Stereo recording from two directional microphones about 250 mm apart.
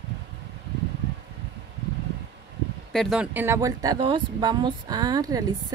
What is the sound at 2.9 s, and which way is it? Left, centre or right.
A woman's voice, centre.